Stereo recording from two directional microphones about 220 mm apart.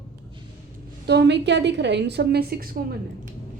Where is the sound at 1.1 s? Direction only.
50° right (ahead or behind).